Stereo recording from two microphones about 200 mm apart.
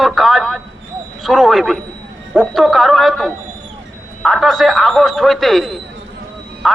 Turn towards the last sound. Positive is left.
turn(degrees=0)  # may be behind; listen again after turning